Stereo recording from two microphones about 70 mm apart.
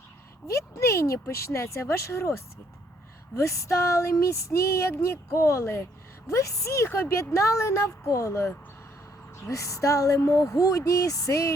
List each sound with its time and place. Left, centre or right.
0.4 s speech: left
3.3 s speech: left